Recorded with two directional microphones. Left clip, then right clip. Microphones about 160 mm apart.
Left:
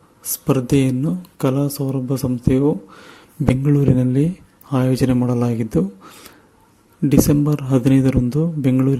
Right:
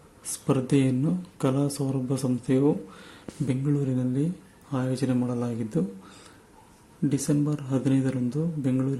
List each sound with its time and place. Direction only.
0.4 s speech: 35° left (ahead or behind)
3.5 s speech: 50° left (ahead or behind)
7.1 s speech: 50° left (ahead or behind)